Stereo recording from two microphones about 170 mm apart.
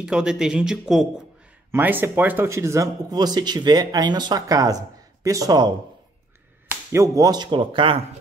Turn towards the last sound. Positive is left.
turn(degrees=-30)  # may be behind; listen again after turning